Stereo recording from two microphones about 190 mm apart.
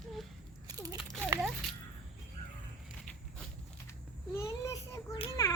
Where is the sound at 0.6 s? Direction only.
20° right (ahead or behind).